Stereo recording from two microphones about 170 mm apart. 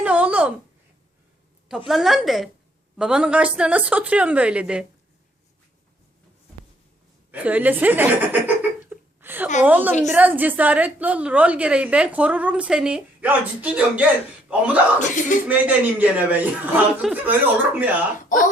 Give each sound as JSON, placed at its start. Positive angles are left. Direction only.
{"t": 0.0, "sound": "a sound", "side_deg": -10}
{"t": 1.9, "sound": "a woman's voice", "side_deg": 0}
{"t": 7.3, "sound": "a sound", "side_deg": -10}
{"t": 9.6, "sound": "a woman's voice", "side_deg": -10}
{"t": 14.9, "sound": "speech", "side_deg": 50}
{"t": 15.4, "sound": "a woman's voice", "side_deg": -10}
{"t": 18.3, "sound": "speech", "side_deg": 50}